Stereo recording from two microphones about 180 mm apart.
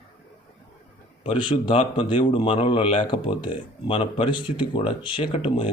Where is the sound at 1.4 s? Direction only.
30° left (ahead or behind).